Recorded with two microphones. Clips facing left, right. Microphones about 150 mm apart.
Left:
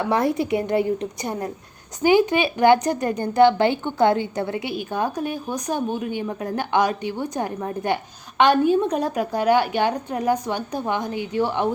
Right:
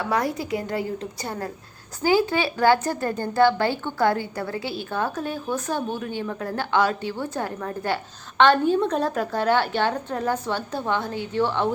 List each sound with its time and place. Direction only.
0.0 s a woman's voice: 25° left (ahead or behind)